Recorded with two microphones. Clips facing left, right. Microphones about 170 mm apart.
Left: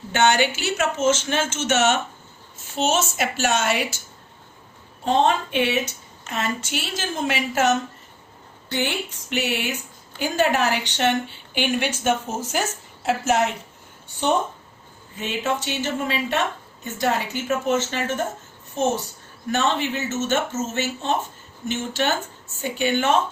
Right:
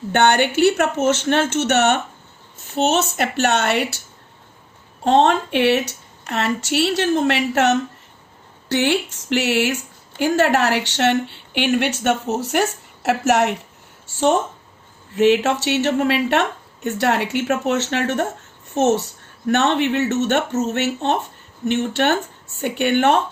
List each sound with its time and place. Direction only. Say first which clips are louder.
0.1 s a woman's voice: right 3 dB; 60° right (ahead or behind)
5.0 s speech: right 4 dB; 70° right (ahead or behind)
14.1 s a woman's voice: right 4 dB; 80° right; by 23.2 s 65° right (ahead or behind)